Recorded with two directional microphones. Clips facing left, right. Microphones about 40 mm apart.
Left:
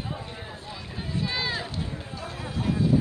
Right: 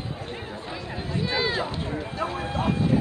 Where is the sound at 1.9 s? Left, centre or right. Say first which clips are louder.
Right 7 dB; right.